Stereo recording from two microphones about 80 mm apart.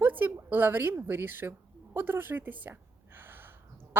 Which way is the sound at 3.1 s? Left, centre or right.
Right.